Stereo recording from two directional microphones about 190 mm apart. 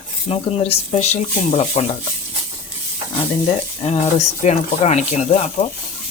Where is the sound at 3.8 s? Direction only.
30° left (ahead or behind).